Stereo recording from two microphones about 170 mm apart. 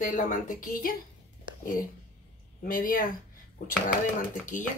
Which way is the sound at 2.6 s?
55° left (ahead or behind).